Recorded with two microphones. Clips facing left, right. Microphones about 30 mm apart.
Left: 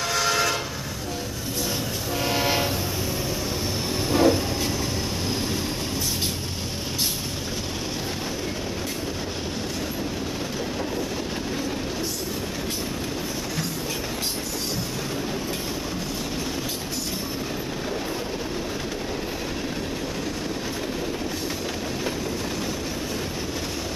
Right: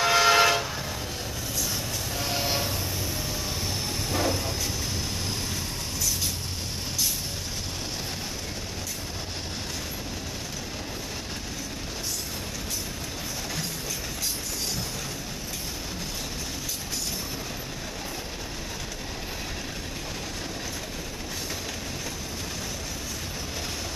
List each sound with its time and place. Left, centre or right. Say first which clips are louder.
0.0 s train: right 4 dB; centre
2.1 s train: left 6 dB; centre
4.1 s vehicle: left 8 dB; centre